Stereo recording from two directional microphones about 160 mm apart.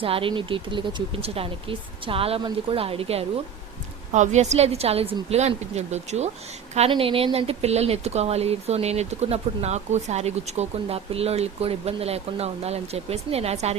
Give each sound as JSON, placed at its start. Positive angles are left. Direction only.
{"t": 0.0, "sound": "speech", "side_deg": -35}